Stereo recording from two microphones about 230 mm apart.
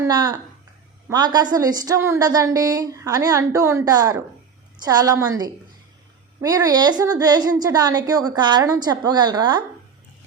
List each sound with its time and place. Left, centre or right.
0.0 s a woman's voice: centre